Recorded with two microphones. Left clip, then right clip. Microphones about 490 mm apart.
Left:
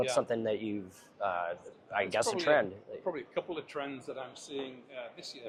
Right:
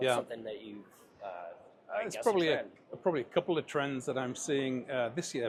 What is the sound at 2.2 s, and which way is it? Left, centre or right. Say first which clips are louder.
Speech: right 7 dB; left.